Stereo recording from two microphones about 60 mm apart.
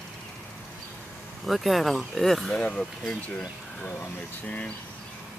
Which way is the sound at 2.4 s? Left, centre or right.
Centre.